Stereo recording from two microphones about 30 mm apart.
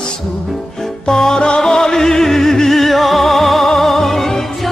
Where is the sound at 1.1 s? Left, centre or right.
Centre.